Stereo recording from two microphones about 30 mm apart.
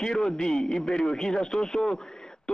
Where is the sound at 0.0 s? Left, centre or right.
Left.